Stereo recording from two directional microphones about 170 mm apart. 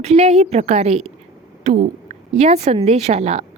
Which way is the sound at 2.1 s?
40° right (ahead or behind).